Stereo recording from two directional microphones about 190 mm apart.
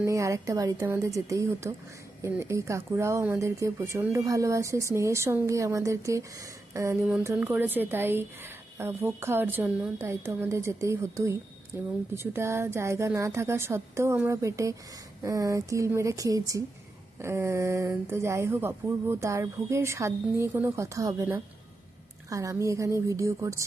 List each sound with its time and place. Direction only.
0.0 s speech: 15° right (ahead or behind)